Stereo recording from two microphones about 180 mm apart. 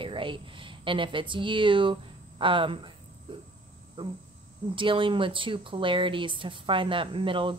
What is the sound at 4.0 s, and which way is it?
Speech, 30° right (ahead or behind).